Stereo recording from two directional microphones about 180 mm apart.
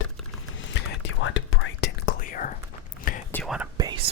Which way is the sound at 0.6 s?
90° left.